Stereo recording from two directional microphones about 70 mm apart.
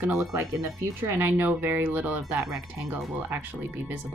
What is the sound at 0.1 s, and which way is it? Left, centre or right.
Speech, right.